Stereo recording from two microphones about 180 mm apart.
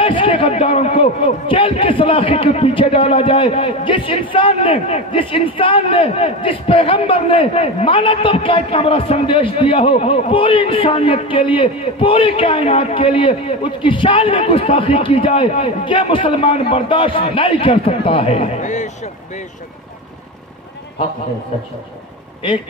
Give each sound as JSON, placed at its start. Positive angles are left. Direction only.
{"t": 0.0, "sound": "a man's voice", "side_deg": 30}